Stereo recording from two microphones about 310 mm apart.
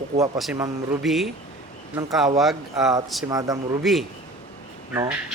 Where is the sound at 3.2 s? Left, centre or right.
Centre.